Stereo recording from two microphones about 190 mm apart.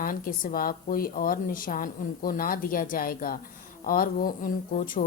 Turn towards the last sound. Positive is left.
turn(degrees=45)  # may be behind; listen again after turning